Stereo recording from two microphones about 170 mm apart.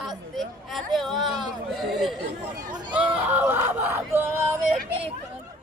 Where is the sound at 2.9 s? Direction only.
10° right (ahead or behind).